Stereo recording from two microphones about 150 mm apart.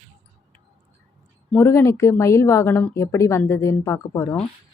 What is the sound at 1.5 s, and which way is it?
A woman's voice, 15° left (ahead or behind).